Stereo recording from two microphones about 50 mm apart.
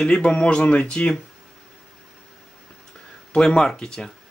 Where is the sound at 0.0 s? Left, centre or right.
Centre.